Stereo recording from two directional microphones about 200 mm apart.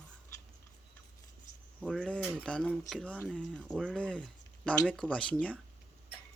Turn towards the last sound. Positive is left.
turn(degrees=5)  # may be behind; listen again after turning